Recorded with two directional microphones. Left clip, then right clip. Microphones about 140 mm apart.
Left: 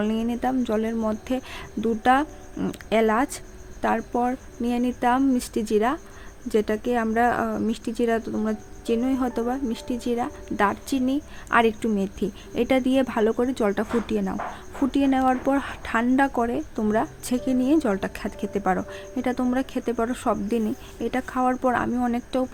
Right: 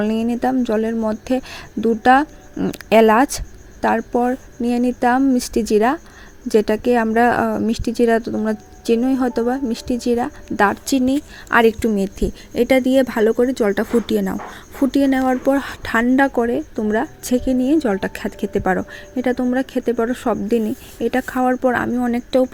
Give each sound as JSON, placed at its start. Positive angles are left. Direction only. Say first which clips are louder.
{"t": 0.0, "sound": "speech", "louder": "right 6 dB", "side_deg": -40}
{"t": 2.7, "sound": "speech", "louder": "right 9 dB", "side_deg": -50}
{"t": 14.1, "sound": "speech", "louder": "right 7 dB", "side_deg": -40}
{"t": 14.8, "sound": "a woman's voice", "louder": "right 5 dB", "side_deg": -25}